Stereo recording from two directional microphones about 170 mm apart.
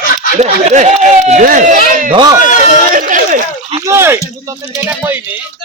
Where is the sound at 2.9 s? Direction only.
50° right (ahead or behind).